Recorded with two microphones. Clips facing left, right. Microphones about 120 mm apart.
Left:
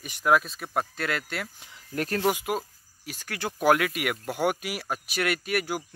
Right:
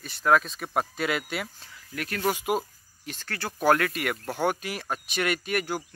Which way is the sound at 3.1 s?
10° left (ahead or behind).